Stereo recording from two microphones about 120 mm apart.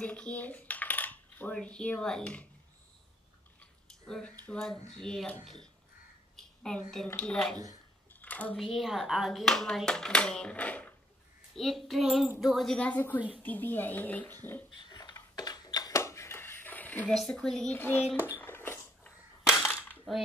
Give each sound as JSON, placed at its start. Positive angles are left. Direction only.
{"t": 0.0, "sound": "speech", "side_deg": 10}
{"t": 4.0, "sound": "speech", "side_deg": 5}
{"t": 6.3, "sound": "a sound", "side_deg": 5}
{"t": 7.2, "sound": "speech", "side_deg": 5}
{"t": 8.2, "sound": "a sound", "side_deg": 10}
{"t": 8.5, "sound": "speech", "side_deg": 0}
{"t": 11.5, "sound": "speech", "side_deg": 0}
{"t": 14.8, "sound": "a sound", "side_deg": 35}
{"t": 17.1, "sound": "speech", "side_deg": 5}
{"t": 17.7, "sound": "speech", "side_deg": 15}
{"t": 18.1, "sound": "a sound", "side_deg": 15}
{"t": 19.6, "sound": "cap gun", "side_deg": 15}